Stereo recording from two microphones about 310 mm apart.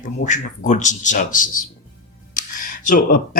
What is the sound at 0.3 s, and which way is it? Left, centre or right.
Speech, left.